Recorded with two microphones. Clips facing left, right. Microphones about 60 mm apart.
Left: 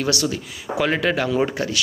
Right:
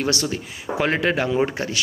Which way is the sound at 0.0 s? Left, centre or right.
Right.